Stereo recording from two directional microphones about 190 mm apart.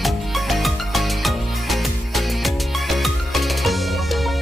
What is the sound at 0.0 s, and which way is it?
Music, centre (ahead or behind).